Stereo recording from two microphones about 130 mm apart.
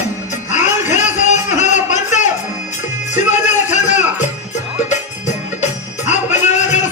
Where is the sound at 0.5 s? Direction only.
70° left (ahead or behind).